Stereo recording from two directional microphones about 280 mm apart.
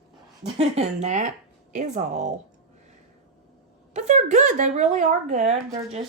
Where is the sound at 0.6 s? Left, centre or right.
Right.